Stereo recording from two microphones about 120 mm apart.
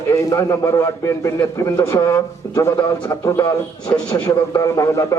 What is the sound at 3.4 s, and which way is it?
Speech, 35° left (ahead or behind).